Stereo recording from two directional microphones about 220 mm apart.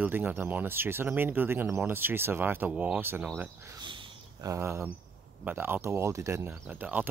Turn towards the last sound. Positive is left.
turn(degrees=-5)  # may be behind; listen again after turning